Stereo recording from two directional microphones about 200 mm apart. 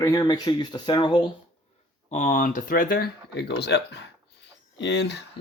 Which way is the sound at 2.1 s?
40° left (ahead or behind).